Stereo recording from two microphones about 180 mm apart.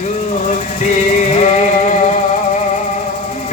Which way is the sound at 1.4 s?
40° left (ahead or behind).